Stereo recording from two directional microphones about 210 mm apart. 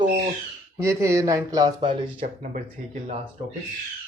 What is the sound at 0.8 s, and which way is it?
Speech, 15° right (ahead or behind).